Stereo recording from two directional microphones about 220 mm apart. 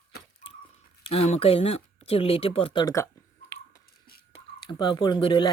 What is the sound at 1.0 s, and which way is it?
Speech, 25° left (ahead or behind).